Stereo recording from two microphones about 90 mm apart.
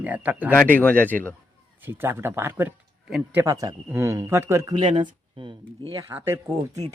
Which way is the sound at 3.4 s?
40° right (ahead or behind).